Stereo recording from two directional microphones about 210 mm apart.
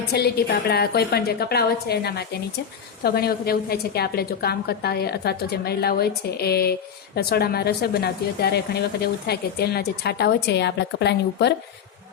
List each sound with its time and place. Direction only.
0.1 s speech: 50° left (ahead or behind)